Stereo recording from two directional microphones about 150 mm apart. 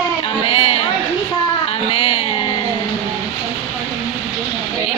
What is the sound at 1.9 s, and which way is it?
Music, 40° left (ahead or behind).